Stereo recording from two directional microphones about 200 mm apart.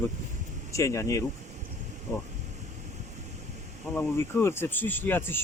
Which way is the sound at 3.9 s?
10° left (ahead or behind).